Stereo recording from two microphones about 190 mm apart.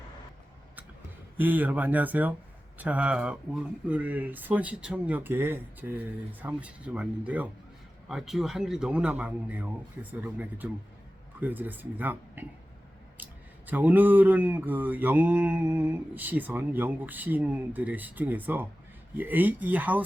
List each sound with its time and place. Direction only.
1.4 s mantra: 10° right (ahead or behind)
8.0 s a man's voice: centre (ahead or behind)
11.3 s mantra: 10° right (ahead or behind)
13.7 s mantra: 10° right (ahead or behind)